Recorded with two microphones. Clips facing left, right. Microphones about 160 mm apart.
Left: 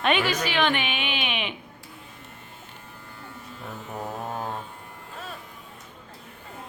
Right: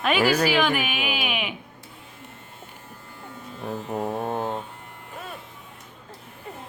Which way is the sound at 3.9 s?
25° right (ahead or behind).